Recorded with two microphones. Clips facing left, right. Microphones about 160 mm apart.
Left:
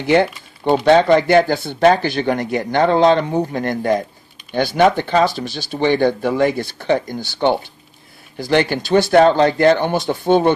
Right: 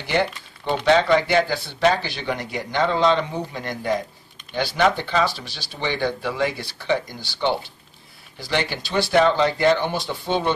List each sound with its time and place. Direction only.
0.0 s speech: 50° left (ahead or behind)